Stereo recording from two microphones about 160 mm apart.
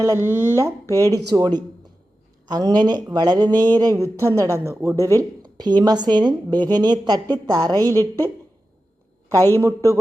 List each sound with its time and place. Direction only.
0.0 s a woman's voice: 15° right (ahead or behind)
9.6 s speech: 15° right (ahead or behind)